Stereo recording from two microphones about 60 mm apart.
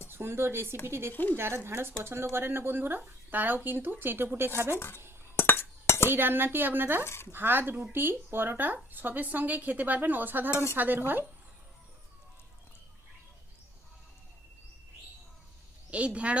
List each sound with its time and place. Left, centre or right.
0.1 s speech: right
1.1 s speech: left
1.6 s speech: right
5.4 s chink: left
6.1 s speech: right
7.0 s speech: left
7.3 s speech: right
10.5 s dishes: left
10.8 s speech: right
15.9 s speech: right